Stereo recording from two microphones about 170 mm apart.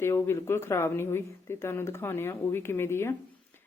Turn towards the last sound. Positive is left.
turn(degrees=15)  # may be behind; listen again after turning